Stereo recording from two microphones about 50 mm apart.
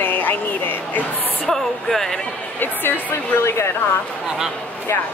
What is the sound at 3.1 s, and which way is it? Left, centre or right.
Speech, left.